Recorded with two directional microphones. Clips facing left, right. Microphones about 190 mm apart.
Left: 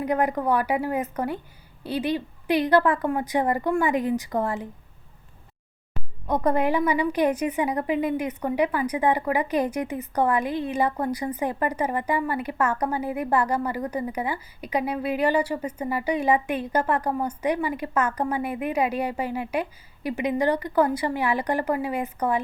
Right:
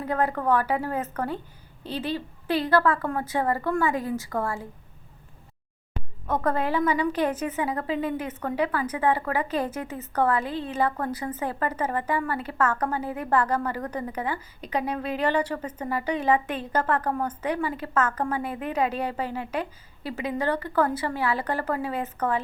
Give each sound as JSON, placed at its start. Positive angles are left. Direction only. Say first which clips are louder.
{"t": 0.0, "sound": "a woman's voice", "louder": "left 2 dB", "side_deg": 15}
{"t": 6.2, "sound": "a woman's voice", "louder": "left 3 dB", "side_deg": 15}